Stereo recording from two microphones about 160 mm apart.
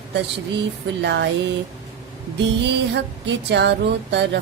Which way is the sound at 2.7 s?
90° right.